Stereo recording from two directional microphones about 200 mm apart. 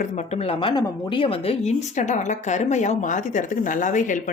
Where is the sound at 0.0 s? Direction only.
35° left (ahead or behind).